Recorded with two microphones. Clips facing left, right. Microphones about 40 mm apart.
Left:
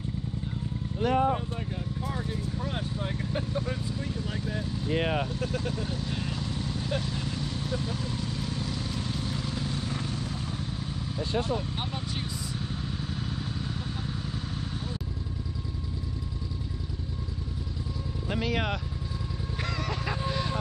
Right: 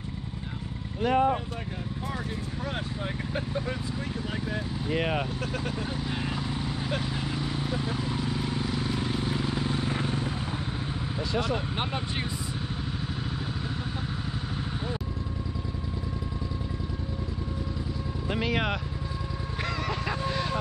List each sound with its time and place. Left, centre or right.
1.0 s speech: right
4.9 s speech: right
5.7 s vehicle: centre
11.5 s speech: right
18.3 s speech: centre
19.8 s a sound: centre